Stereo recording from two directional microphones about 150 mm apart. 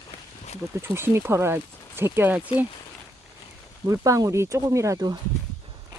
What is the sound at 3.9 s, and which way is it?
Speech, 20° right (ahead or behind).